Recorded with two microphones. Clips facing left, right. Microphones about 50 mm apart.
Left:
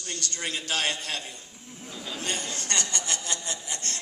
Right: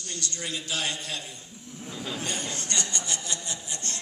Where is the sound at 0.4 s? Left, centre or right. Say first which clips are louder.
Left 3 dB; left.